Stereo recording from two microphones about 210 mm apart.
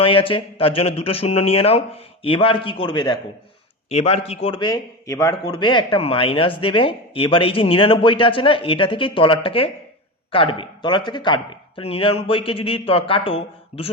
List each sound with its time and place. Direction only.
0.0 s a man's voice: 25° left (ahead or behind)